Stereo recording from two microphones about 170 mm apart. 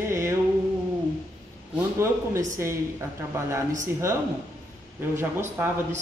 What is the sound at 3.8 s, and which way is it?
A woman's voice, 15° right (ahead or behind).